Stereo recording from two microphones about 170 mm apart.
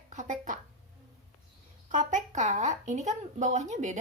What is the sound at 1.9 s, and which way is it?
Speech, 50° right (ahead or behind).